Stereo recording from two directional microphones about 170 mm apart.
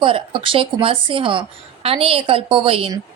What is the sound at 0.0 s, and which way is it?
A woman's voice, 30° right (ahead or behind).